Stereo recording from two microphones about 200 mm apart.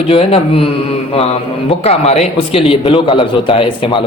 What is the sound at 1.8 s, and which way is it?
A man's voice, 30° left (ahead or behind).